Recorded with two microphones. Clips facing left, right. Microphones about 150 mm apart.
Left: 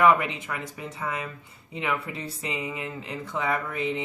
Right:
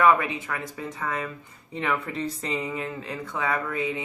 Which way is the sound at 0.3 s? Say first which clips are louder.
Right 2 dB; 15° left (ahead or behind).